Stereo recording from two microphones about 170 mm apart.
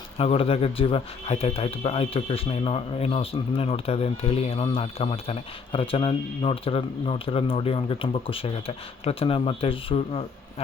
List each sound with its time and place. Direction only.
0.2 s speech: 35° left (ahead or behind)